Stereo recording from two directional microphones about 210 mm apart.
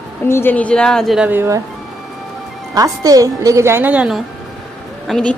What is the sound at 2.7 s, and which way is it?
A woman's voice, 15° right (ahead or behind).